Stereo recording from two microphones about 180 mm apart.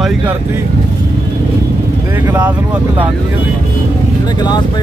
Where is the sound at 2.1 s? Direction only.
10° right (ahead or behind).